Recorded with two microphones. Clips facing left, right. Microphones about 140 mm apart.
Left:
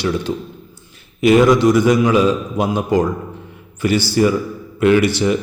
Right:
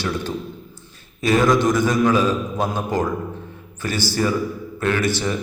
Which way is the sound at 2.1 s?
15° left (ahead or behind).